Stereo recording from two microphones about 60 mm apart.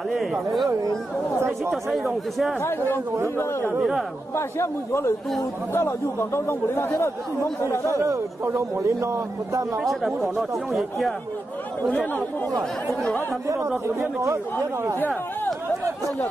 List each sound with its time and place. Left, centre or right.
0.1 s speech: centre
1.7 s speech: centre
4.4 s speech: left
8.0 s a man's voice: right
10.3 s speech: centre
13.8 s speech: right
15.0 s speech: left